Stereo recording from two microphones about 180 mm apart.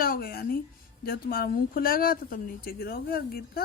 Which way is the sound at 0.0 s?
55° left (ahead or behind).